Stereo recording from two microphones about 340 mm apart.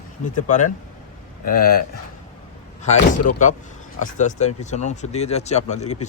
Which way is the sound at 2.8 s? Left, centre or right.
Centre.